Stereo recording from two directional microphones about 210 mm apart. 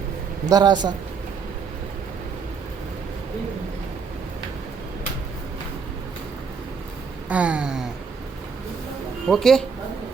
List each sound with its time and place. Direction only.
0.4 s speech: 20° right (ahead or behind)
7.3 s a sound: 5° right (ahead or behind)
9.2 s a man's voice: centre (ahead or behind)